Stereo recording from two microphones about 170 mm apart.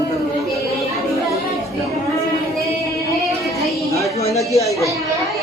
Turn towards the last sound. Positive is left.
turn(degrees=20)  # may be behind; listen again after turning